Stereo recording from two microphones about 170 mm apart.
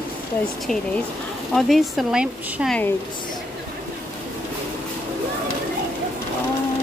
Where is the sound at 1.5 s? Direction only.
Centre (ahead or behind).